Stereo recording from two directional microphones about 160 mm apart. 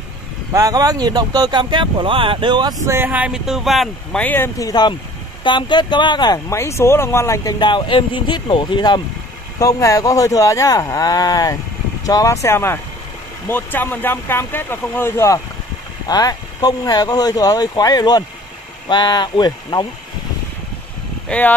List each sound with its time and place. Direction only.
0.5 s speech: 20° right (ahead or behind); by 19.9 s 25° left (ahead or behind)
21.3 s speech: 10° left (ahead or behind)